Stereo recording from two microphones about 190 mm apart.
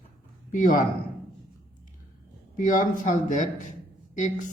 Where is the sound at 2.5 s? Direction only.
45° left (ahead or behind).